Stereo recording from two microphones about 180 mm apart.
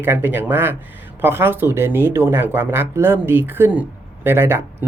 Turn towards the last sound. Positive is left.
turn(degrees=-15)  # may be behind; listen again after turning